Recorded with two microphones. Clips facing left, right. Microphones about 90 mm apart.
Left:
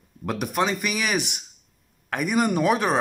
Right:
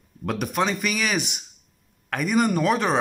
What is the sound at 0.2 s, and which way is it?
Speech, 5° left (ahead or behind).